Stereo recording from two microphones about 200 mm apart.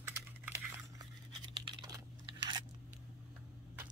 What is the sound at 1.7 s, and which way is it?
Typing, 20° right (ahead or behind).